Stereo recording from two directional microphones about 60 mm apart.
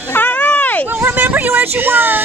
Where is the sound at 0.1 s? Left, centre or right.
Left.